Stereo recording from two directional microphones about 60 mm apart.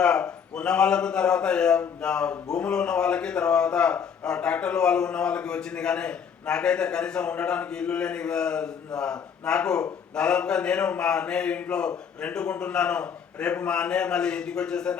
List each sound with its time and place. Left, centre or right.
0.0 s a man's voice: centre